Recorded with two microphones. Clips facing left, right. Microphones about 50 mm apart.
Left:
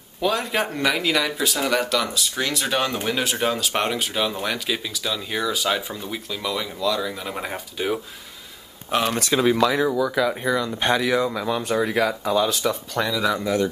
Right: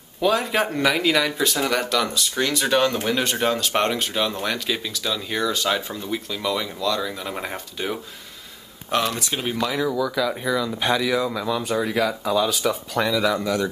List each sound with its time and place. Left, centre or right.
0.2 s speech: centre